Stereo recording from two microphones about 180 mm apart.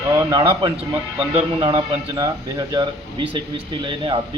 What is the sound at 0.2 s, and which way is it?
A man's voice, 20° right (ahead or behind).